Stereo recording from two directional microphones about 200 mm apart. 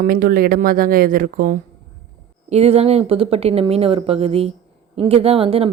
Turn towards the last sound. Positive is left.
turn(degrees=-30)  # may be behind; listen again after turning